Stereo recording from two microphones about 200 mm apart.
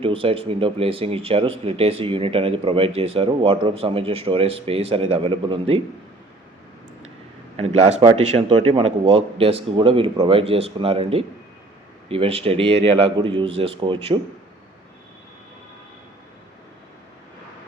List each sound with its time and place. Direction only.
0.0 s speech: 25° right (ahead or behind)
7.5 s speech: 30° right (ahead or behind)